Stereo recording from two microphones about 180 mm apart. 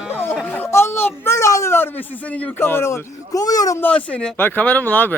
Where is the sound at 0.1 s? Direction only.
10° left (ahead or behind).